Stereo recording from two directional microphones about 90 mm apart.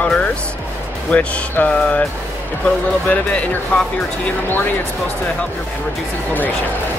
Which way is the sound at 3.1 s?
15° left (ahead or behind).